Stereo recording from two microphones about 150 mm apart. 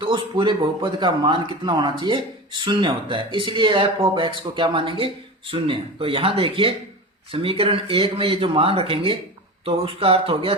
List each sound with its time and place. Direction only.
0.0 s speech: 35° right (ahead or behind)